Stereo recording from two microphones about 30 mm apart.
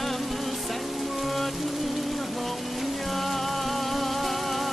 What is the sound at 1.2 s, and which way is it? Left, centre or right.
Rain, centre.